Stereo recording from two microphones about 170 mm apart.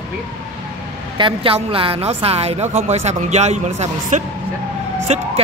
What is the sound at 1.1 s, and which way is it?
A woman's voice, 30° right (ahead or behind).